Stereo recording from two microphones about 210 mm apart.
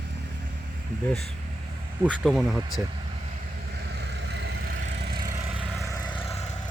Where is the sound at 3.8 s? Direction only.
55° right (ahead or behind).